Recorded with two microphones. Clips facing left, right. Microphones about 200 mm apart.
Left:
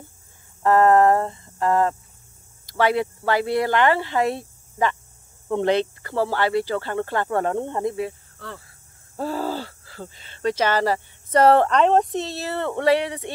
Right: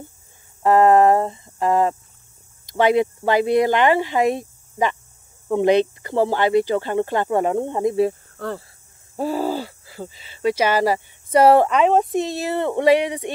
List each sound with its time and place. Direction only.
0.6 s a sound: 15° right (ahead or behind)
2.6 s speech: 20° right (ahead or behind)
8.1 s cricket: 50° right (ahead or behind)
9.1 s speech: 15° right (ahead or behind)